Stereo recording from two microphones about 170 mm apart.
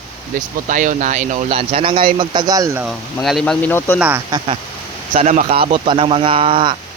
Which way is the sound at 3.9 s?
10° right (ahead or behind).